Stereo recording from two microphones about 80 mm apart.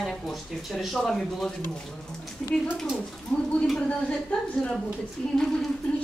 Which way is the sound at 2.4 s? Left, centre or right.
Centre.